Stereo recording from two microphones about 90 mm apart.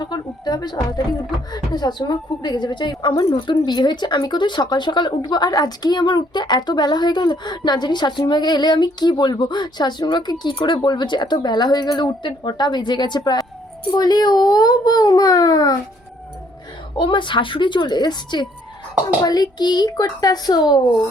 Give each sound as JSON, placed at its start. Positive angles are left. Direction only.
{"t": 0.0, "sound": "speech", "side_deg": 50}
{"t": 17.0, "sound": "a woman's voice", "side_deg": 65}